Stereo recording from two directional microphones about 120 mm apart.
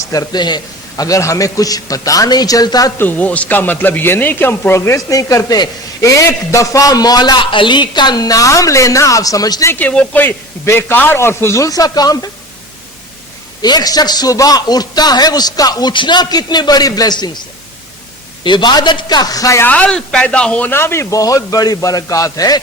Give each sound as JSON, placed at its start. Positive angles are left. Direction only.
{"t": 0.0, "sound": "a man's voice", "side_deg": 30}
{"t": 3.0, "sound": "speech", "side_deg": 15}
{"t": 9.7, "sound": "speech", "side_deg": 10}
{"t": 13.6, "sound": "a man's voice", "side_deg": 35}
{"t": 18.4, "sound": "a man's voice", "side_deg": 40}
{"t": 19.6, "sound": "speech", "side_deg": 10}